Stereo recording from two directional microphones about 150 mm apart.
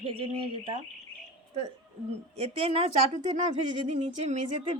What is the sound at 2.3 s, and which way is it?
A woman's voice, 40° right (ahead or behind).